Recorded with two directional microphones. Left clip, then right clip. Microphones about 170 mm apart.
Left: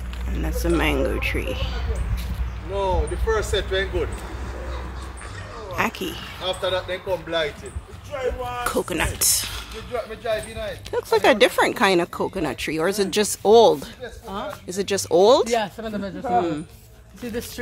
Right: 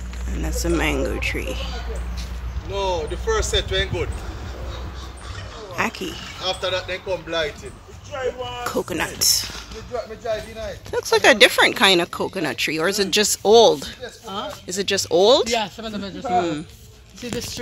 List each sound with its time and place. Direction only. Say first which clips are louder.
0.3 s speech: even; centre (ahead or behind)
2.7 s speech: even; 40° left (ahead or behind)
3.3 s speech: right 1 dB; 55° left (ahead or behind)
5.8 s a sound: even; centre (ahead or behind)
6.4 s speech: even; 45° left (ahead or behind)
7.2 s speech: even; 20° left (ahead or behind)
8.6 s speech: even; centre (ahead or behind)
15.5 s speech: even; 45° left (ahead or behind)
16.3 s speech: right 1 dB; centre (ahead or behind)